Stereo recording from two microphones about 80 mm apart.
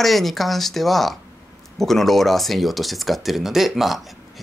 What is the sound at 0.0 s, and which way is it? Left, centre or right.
Speech, centre.